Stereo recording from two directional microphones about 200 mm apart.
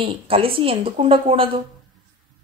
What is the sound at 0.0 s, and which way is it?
Speech, 25° right (ahead or behind).